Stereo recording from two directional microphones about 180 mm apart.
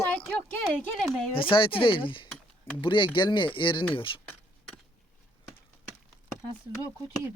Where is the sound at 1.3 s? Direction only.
30° left (ahead or behind).